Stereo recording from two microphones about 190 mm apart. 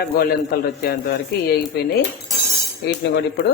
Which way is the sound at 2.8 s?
60° left (ahead or behind).